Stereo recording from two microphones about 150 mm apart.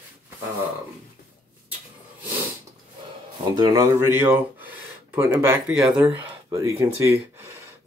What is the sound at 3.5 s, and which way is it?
Speech, 25° right (ahead or behind).